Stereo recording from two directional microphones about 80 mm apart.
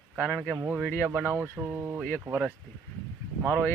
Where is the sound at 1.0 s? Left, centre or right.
Right.